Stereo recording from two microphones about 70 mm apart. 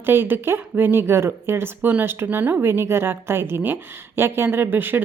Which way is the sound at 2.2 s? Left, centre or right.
Right.